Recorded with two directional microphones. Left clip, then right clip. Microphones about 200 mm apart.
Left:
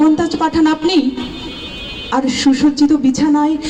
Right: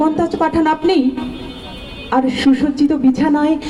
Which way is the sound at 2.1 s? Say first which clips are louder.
Even; 40° right (ahead or behind).